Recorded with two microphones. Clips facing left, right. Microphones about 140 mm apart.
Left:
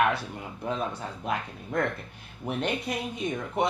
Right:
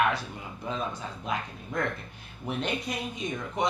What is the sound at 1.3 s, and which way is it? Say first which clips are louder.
A man's voice: left 2 dB; 60° left (ahead or behind).